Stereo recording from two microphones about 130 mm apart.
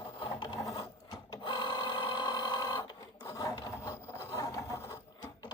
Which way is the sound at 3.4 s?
35° left (ahead or behind).